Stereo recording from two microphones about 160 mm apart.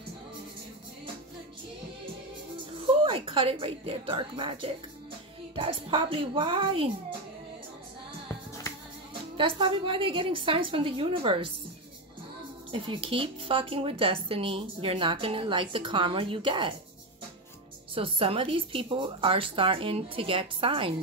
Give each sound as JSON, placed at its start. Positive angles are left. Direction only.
{"t": 2.9, "sound": "a woman's voice", "side_deg": -35}
{"t": 9.4, "sound": "speech", "side_deg": -30}
{"t": 12.7, "sound": "speech", "side_deg": -30}
{"t": 17.9, "sound": "speech", "side_deg": -35}